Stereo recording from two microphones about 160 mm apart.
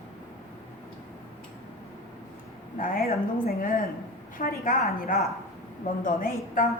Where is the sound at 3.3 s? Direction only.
60° left (ahead or behind).